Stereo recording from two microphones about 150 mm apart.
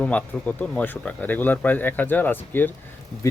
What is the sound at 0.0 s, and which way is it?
Speech, 10° left (ahead or behind).